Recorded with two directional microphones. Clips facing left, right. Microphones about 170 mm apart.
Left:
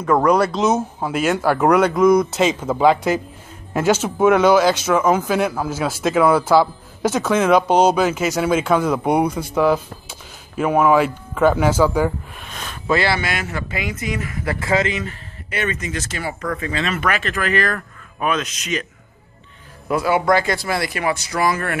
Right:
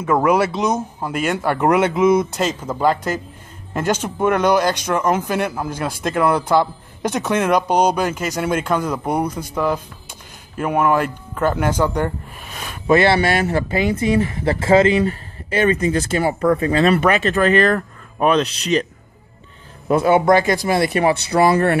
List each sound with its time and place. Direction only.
0.0 s speech: 5° right (ahead or behind)
0.6 s speech: 5° left (ahead or behind)
2.4 s speech: 10° left (ahead or behind)
12.4 s a man's voice: 10° right (ahead or behind); by 18.9 s 35° right (ahead or behind)
19.9 s speech: 25° right (ahead or behind)